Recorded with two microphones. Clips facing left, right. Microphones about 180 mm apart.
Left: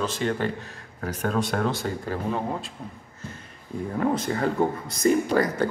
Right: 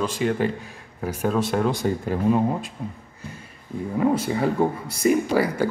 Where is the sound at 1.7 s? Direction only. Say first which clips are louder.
Right 5 dB; 15° right (ahead or behind).